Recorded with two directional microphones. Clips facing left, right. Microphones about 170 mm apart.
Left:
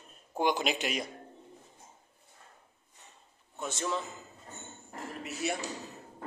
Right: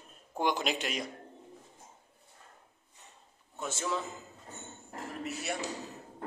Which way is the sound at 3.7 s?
5° right (ahead or behind).